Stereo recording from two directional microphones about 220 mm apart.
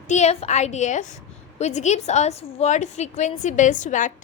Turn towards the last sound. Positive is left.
turn(degrees=35)  # may be behind; listen again after turning